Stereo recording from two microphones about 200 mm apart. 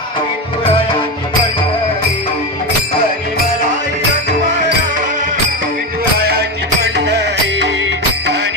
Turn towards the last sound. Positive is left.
turn(degrees=-60)  # may be behind; listen again after turning